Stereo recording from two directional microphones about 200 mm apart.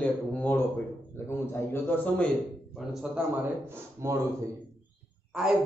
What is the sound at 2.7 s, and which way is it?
A man's voice, centre (ahead or behind).